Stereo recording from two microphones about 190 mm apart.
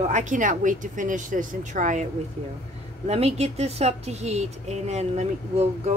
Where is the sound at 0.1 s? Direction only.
40° right (ahead or behind).